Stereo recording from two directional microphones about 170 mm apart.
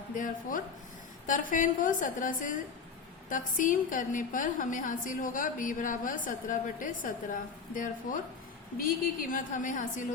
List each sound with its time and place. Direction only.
0.1 s a woman's voice: 50° left (ahead or behind)